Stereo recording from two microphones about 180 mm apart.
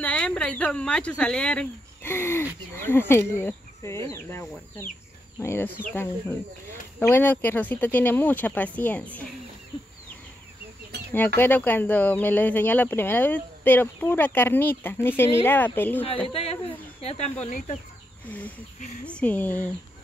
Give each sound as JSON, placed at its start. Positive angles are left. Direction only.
{"t": 0.0, "sound": "speech", "side_deg": 5}
{"t": 7.0, "sound": "speech", "side_deg": 10}
{"t": 11.3, "sound": "speech", "side_deg": 10}
{"t": 16.3, "sound": "speech", "side_deg": 35}
{"t": 19.0, "sound": "speech", "side_deg": 5}